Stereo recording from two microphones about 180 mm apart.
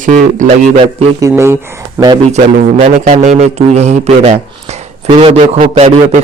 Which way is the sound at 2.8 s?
40° right (ahead or behind).